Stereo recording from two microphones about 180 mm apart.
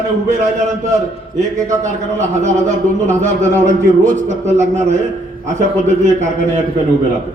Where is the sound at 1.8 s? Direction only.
40° right (ahead or behind).